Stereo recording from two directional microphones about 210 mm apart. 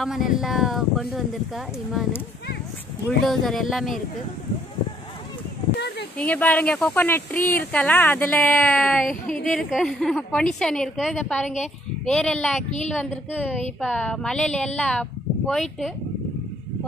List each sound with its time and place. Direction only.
0.0 s a woman's voice: centre (ahead or behind)
3.3 s a woman's voice: centre (ahead or behind)
5.8 s a sound: 50° left (ahead or behind)
6.1 s a woman's voice: 5° left (ahead or behind)